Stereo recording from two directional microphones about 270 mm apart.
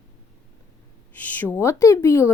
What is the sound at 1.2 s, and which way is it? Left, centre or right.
Speech, centre.